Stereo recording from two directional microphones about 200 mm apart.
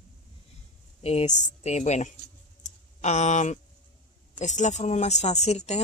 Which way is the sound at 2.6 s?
35° left (ahead or behind).